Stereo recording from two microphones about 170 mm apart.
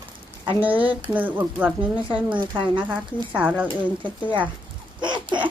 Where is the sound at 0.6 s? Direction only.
10° right (ahead or behind).